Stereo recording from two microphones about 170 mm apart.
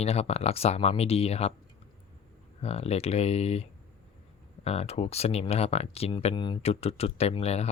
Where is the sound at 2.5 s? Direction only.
35° left (ahead or behind).